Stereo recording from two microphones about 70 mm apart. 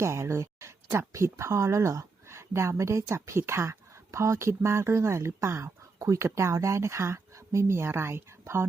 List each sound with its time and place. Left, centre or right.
0.0 s speech: right